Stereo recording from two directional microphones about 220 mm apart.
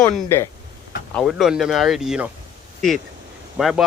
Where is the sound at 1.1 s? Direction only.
Centre (ahead or behind).